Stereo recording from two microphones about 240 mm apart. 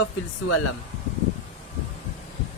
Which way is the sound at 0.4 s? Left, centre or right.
Left.